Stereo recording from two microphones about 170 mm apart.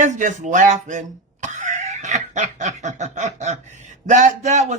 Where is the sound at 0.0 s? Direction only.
45° right (ahead or behind).